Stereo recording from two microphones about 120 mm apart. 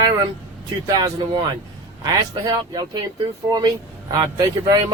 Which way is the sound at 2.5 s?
35° right (ahead or behind).